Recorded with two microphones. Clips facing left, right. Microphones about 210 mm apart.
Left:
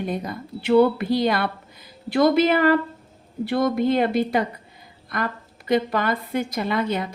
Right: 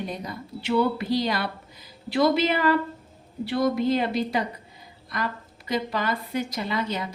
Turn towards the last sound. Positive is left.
turn(degrees=55)  # may be behind; listen again after turning